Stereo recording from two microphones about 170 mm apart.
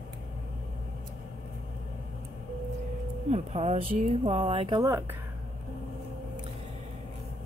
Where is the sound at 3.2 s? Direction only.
40° right (ahead or behind).